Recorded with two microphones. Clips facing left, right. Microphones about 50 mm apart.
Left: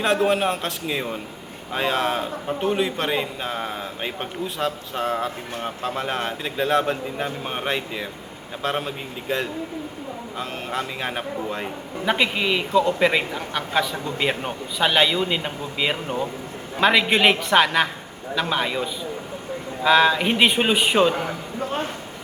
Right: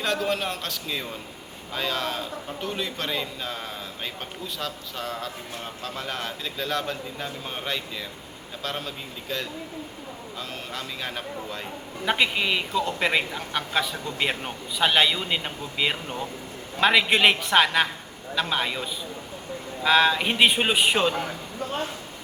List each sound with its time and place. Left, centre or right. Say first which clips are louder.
0.0 s a man's voice: left 6 dB; left
12.0 s a man's voice: left 2 dB; centre